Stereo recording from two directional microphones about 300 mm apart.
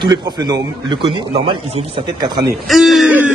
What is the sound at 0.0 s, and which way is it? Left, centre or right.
A man's voice, centre.